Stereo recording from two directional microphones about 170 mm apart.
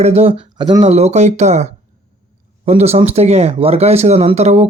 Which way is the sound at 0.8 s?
40° right (ahead or behind).